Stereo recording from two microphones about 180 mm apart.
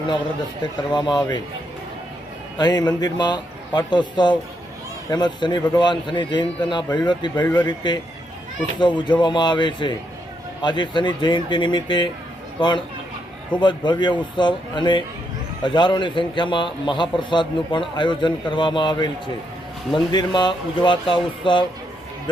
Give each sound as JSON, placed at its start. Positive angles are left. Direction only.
{"t": 0.6, "sound": "a man's voice", "side_deg": 25}
{"t": 2.6, "sound": "a man's voice", "side_deg": 25}